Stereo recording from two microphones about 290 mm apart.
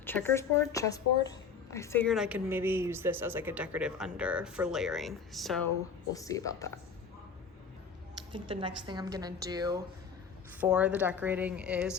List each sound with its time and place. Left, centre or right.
0.0 s speech: centre
6.1 s speech: centre
8.3 s a woman's voice: centre